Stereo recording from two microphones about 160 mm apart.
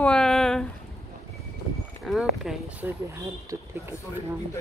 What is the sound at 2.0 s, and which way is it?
A woman's voice, centre (ahead or behind).